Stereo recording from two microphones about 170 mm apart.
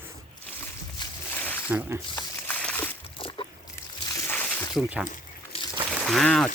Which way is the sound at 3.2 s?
30° left (ahead or behind).